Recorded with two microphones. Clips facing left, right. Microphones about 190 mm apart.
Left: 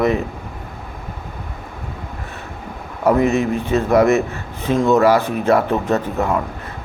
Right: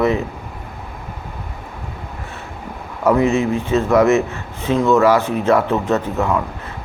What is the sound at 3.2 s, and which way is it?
Speech, 20° right (ahead or behind).